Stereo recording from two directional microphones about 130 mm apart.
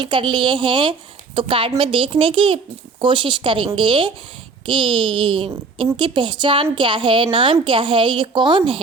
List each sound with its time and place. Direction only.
0.0 s a woman's voice: 40° right (ahead or behind)